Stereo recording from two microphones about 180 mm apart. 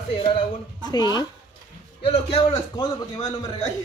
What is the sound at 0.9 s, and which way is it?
Speech, 20° left (ahead or behind).